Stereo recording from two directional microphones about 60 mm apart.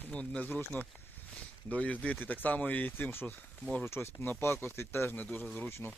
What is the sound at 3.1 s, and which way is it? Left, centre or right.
Speech, left.